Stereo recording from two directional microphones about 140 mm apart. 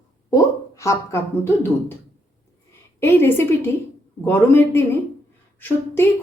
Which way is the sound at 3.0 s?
15° left (ahead or behind).